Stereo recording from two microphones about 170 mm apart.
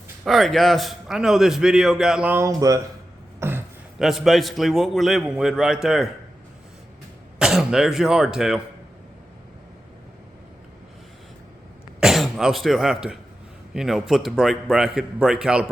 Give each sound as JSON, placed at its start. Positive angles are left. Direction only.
{"t": 0.3, "sound": "a man's voice", "side_deg": 0}
{"t": 3.4, "sound": "a sound", "side_deg": -15}
{"t": 3.9, "sound": "a man's voice", "side_deg": 0}
{"t": 7.3, "sound": "a man's voice", "side_deg": -5}
{"t": 11.9, "sound": "a man's voice", "side_deg": 0}